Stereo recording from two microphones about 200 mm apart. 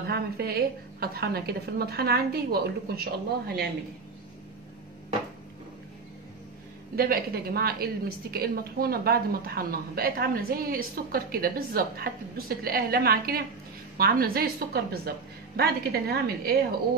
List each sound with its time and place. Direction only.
0.1 s a woman's voice: 50° right (ahead or behind)
7.0 s a woman's voice: 50° right (ahead or behind)